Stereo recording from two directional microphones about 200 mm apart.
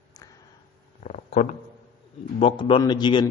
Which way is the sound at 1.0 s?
35° left (ahead or behind).